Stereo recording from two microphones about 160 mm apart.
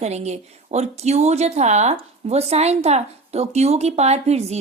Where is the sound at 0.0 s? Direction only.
45° right (ahead or behind).